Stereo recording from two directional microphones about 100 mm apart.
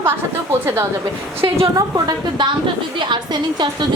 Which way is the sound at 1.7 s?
40° right (ahead or behind).